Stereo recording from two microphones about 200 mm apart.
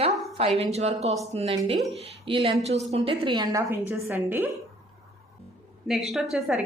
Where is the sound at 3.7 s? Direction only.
10° right (ahead or behind).